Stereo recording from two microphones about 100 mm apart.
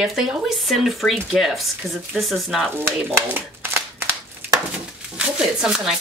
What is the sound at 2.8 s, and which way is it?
Shuffling cards, 20° right (ahead or behind).